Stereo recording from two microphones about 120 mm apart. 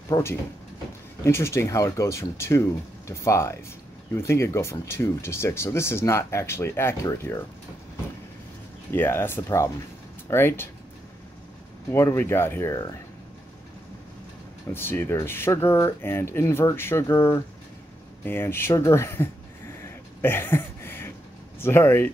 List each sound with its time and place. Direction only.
0.1 s speech: 20° left (ahead or behind)
8.9 s speech: 20° left (ahead or behind)
11.9 s speech: 20° left (ahead or behind)
14.7 s speech: 20° left (ahead or behind)
20.2 s a sound: 20° left (ahead or behind)
21.5 s speech: 20° left (ahead or behind)